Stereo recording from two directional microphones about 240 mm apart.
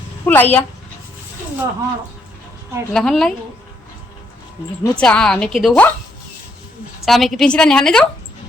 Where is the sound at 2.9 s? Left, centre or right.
Centre.